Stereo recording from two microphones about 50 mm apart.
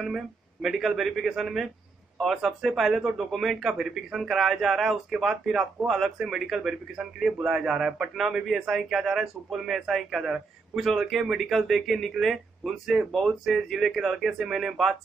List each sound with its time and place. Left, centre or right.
0.0 s a man's voice: centre